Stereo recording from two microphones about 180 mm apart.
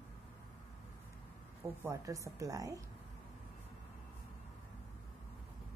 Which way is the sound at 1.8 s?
15° right (ahead or behind).